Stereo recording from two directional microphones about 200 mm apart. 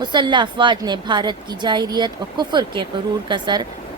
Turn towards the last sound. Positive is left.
turn(degrees=-20)  # may be behind; listen again after turning